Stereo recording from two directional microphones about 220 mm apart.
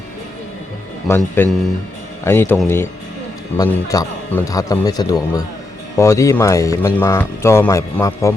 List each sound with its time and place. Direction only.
1.0 s speech: 10° left (ahead or behind)